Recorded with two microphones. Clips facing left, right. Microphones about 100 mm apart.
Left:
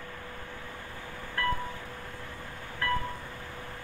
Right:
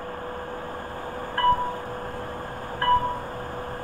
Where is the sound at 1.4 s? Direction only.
45° right (ahead or behind).